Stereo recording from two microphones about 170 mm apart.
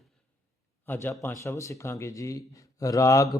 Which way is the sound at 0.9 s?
10° left (ahead or behind).